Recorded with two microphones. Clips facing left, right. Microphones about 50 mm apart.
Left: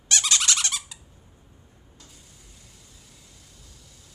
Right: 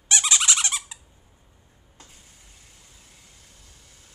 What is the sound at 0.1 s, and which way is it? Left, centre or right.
Squeak, centre.